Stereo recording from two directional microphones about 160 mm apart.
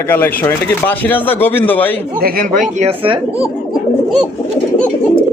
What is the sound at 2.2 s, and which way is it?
Speech, 60° right (ahead or behind).